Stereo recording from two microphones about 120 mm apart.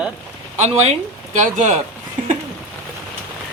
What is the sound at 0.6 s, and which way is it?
Speech, 65° right (ahead or behind).